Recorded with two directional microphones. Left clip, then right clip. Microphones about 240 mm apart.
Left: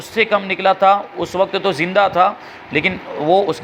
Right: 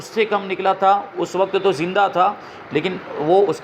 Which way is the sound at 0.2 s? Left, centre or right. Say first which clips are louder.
Left 4 dB; left.